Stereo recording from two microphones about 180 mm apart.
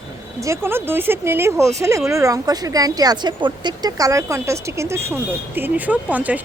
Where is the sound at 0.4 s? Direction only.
15° right (ahead or behind).